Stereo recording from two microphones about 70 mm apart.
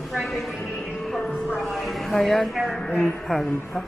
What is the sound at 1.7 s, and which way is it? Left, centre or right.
A woman's voice, centre.